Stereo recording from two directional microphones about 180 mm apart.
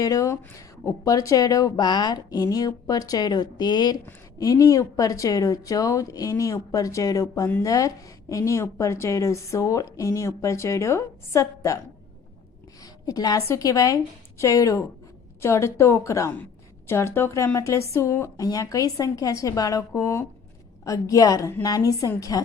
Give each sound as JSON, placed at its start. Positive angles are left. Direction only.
{"t": 0.0, "sound": "a woman's voice", "side_deg": 20}
{"t": 12.8, "sound": "a woman's voice", "side_deg": 20}